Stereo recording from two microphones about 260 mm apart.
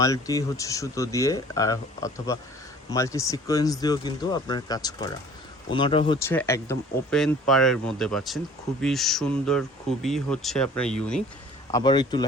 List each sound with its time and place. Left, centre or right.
0.0 s speech: centre
11.7 s speech: centre